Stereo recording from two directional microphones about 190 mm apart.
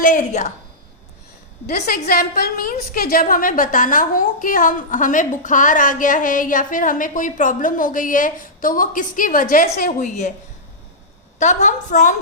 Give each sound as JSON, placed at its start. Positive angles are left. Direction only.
{"t": 0.0, "sound": "a woman's voice", "side_deg": 40}
{"t": 1.6, "sound": "a woman's voice", "side_deg": 55}
{"t": 11.3, "sound": "a woman's voice", "side_deg": 40}